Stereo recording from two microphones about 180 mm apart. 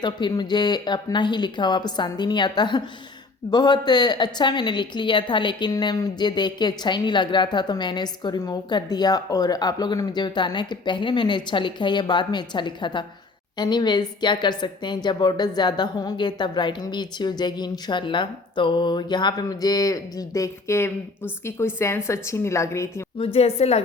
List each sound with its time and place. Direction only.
0.0 s a woman's voice: 25° left (ahead or behind)
23.1 s a woman's voice: 35° left (ahead or behind)